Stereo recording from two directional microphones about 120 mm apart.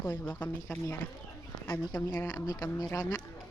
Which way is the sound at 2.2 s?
35° left (ahead or behind).